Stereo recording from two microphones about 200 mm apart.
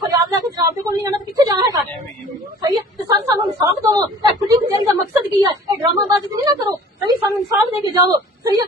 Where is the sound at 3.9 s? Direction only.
20° right (ahead or behind).